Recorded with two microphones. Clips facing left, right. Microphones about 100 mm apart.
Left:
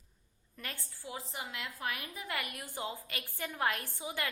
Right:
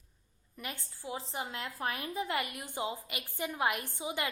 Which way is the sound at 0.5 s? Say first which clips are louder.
Right 3 dB; 15° right (ahead or behind).